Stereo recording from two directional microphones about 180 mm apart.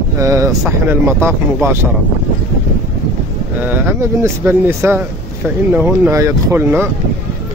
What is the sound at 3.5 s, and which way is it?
Speech, 10° right (ahead or behind).